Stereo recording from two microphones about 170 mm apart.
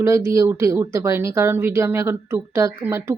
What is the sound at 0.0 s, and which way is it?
Speech, 15° right (ahead or behind).